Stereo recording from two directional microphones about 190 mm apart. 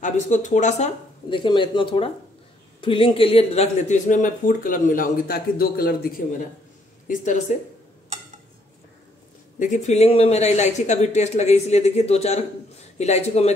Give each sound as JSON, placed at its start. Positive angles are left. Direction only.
{"t": 0.0, "sound": "speech", "side_deg": 40}
{"t": 7.1, "sound": "speech", "side_deg": 40}
{"t": 9.6, "sound": "speech", "side_deg": 40}